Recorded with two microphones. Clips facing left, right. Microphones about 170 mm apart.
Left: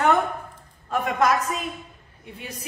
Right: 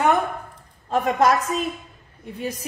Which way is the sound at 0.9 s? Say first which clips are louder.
Right 3 dB; 30° right (ahead or behind).